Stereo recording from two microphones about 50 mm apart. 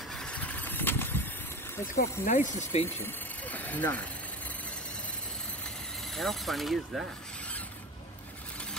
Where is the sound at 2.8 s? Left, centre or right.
Left.